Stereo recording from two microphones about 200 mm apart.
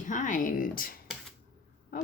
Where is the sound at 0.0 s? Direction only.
40° left (ahead or behind).